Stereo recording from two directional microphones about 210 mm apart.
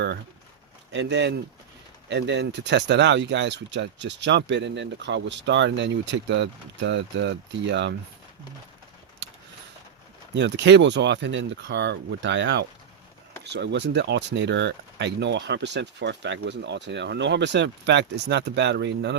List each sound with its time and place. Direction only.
0.9 s speech: 55° right (ahead or behind)
10.3 s speech: 55° right (ahead or behind)